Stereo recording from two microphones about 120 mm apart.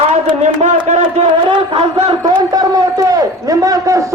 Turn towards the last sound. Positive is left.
turn(degrees=-30)  # may be behind; listen again after turning